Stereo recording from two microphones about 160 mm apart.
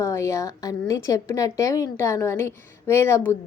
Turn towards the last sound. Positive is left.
turn(degrees=15)  # may be behind; listen again after turning